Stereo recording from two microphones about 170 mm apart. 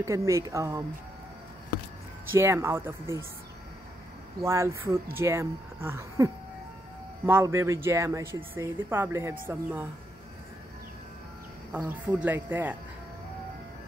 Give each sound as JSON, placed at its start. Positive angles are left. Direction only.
{"t": 0.0, "sound": "speech", "side_deg": -20}
{"t": 2.3, "sound": "speech", "side_deg": -15}
{"t": 4.4, "sound": "speech", "side_deg": -15}
{"t": 11.7, "sound": "speech", "side_deg": -10}